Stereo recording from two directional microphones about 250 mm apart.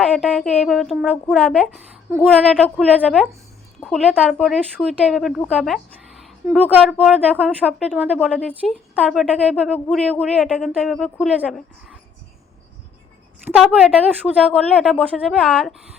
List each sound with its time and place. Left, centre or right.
0.0 s speech: centre
13.4 s speech: centre